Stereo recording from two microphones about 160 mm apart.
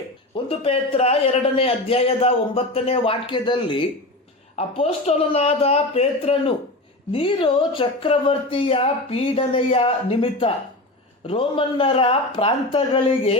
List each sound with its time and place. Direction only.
0.3 s a man's voice: 35° left (ahead or behind)